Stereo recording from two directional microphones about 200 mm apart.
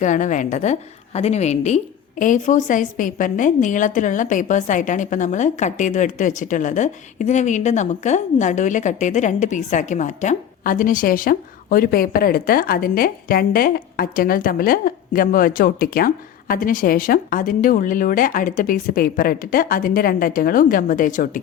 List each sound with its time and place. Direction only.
0.0 s a woman's voice: 40° left (ahead or behind)